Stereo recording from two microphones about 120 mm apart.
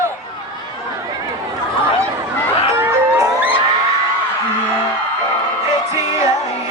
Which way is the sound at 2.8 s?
25° right (ahead or behind).